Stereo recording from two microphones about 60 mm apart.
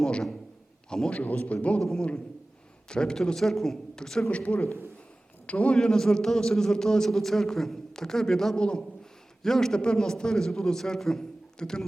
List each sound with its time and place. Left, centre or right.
0.0 s a man's voice: centre
1.2 s a man's voice: left
1.8 s a man's voice: centre
4.3 s a man's voice: left
5.7 s a man's voice: centre